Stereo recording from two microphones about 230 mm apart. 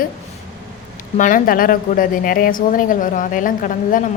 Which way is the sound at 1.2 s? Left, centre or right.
Left.